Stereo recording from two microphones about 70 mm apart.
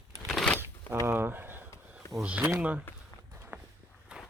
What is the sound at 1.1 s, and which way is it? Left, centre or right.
Speech, right.